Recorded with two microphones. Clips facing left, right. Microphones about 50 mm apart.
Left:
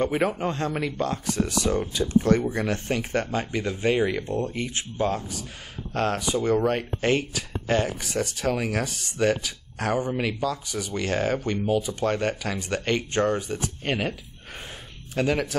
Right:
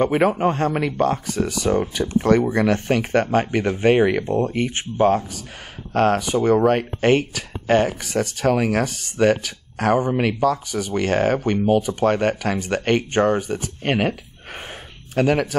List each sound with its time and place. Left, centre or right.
0.0 s speech: right
2.1 s speech: right
11.6 s speech: right
11.9 s speech: right